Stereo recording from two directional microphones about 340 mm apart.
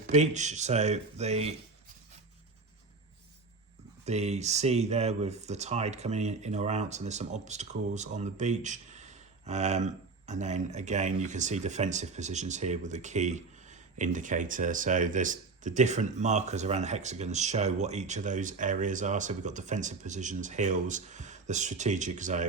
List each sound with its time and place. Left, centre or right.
0.1 s speech: right
4.0 s speech: centre